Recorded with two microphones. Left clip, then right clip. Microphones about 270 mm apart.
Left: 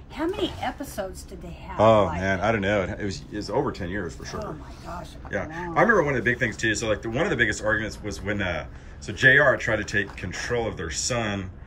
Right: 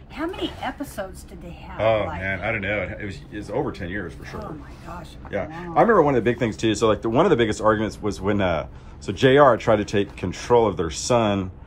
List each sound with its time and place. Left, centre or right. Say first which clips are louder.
0.2 s a man's voice: left 1 dB; centre